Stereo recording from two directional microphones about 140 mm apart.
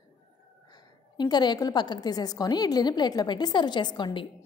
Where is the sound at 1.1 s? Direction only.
30° left (ahead or behind).